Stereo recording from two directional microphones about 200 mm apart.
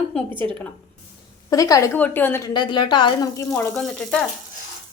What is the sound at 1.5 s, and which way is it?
A woman's voice, 15° left (ahead or behind).